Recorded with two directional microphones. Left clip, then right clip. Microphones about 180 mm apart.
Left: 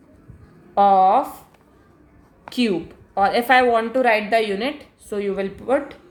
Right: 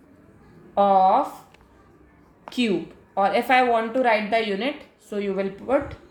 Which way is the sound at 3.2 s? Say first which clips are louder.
Left 3 dB; 35° left (ahead or behind).